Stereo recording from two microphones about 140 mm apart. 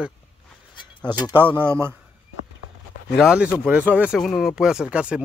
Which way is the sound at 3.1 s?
5° right (ahead or behind).